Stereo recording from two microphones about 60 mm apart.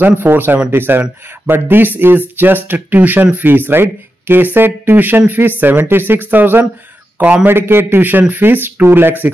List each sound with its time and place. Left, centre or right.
0.0 s speech: right